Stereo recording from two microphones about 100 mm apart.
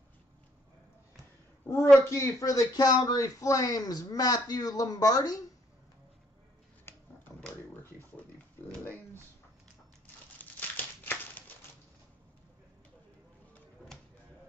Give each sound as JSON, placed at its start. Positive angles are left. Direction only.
{"t": 1.7, "sound": "speech", "side_deg": 30}
{"t": 6.9, "sound": "a sound", "side_deg": 15}
{"t": 11.1, "sound": "typewriter", "side_deg": 15}